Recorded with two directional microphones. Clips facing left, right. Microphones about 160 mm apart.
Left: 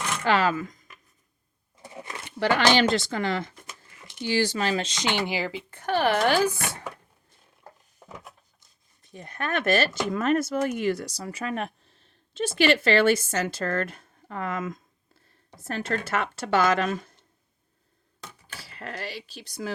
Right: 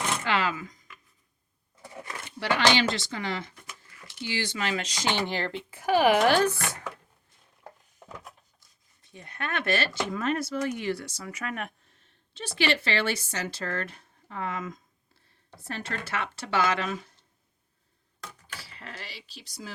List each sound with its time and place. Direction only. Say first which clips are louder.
0.3 s speech: left 8 dB; 45° left (ahead or behind)
1.8 s a sound: left 1 dB; 20° left (ahead or behind)
2.4 s speech: left 3 dB; 50° left (ahead or behind)
3.7 s a sound: left 1 dB; 20° left (ahead or behind)
4.2 s speech: left 6 dB; 45° left (ahead or behind); by 5.6 s 5° left (ahead or behind)
5.7 s speech: right 2 dB; 10° right (ahead or behind)
9.1 s speech: left 4 dB; 40° left (ahead or behind)
12.3 s speech: left 6 dB; 45° left (ahead or behind)
18.4 s speech: left 8 dB; 50° left (ahead or behind)